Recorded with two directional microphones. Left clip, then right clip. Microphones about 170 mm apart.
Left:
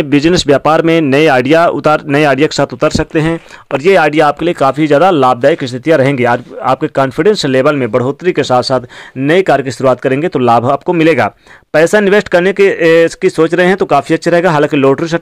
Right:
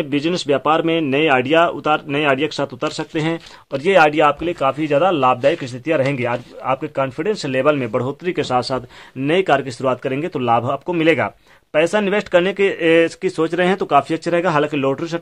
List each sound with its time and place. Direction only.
0.0 s speech: 45° left (ahead or behind)